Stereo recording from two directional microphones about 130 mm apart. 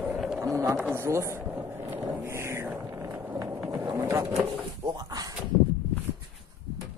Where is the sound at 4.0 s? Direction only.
20° right (ahead or behind).